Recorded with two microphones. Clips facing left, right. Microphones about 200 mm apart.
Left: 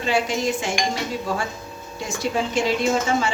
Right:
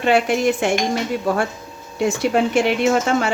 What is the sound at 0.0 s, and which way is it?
Speech, 60° right (ahead or behind).